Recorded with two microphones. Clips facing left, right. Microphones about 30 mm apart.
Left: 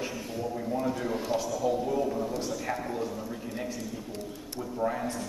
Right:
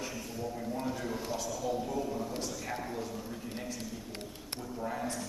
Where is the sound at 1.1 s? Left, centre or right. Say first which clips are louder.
Left 7 dB; left.